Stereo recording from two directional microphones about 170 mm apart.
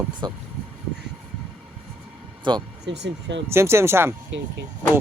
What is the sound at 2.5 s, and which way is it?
Speech, 25° right (ahead or behind).